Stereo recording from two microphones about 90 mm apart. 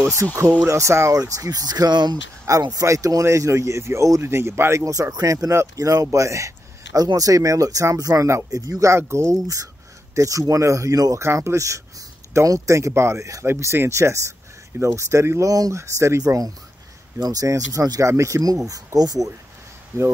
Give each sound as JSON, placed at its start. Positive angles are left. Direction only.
{"t": 0.7, "sound": "speech", "side_deg": -30}
{"t": 2.6, "sound": "speech", "side_deg": -40}
{"t": 6.1, "sound": "a sound", "side_deg": -35}
{"t": 7.2, "sound": "speech", "side_deg": -40}